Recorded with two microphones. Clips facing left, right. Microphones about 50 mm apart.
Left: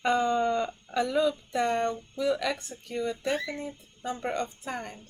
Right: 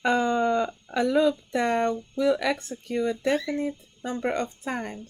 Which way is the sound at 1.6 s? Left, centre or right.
Right.